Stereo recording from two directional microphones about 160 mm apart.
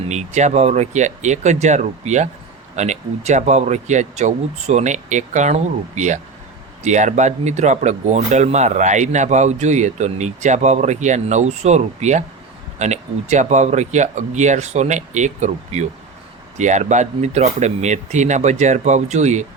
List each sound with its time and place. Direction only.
0.1 s speech: 45° right (ahead or behind)